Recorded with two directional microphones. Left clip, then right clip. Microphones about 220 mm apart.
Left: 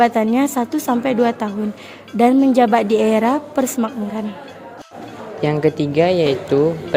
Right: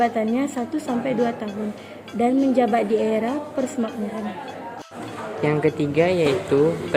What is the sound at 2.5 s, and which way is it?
Speech, 45° left (ahead or behind).